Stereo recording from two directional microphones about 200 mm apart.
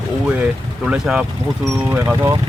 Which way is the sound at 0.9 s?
5° right (ahead or behind).